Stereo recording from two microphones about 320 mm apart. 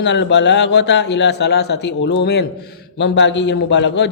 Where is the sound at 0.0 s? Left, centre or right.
Left.